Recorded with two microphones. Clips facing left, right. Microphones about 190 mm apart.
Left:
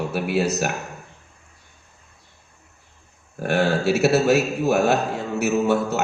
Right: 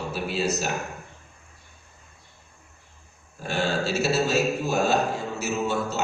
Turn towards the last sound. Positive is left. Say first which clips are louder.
# left 6 dB
turn(degrees=65)  # may be behind; listen again after turning